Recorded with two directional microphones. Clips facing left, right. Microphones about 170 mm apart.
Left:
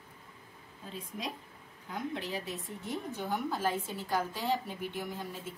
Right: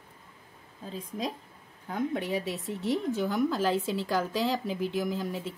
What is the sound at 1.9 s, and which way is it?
Speech, 60° right (ahead or behind).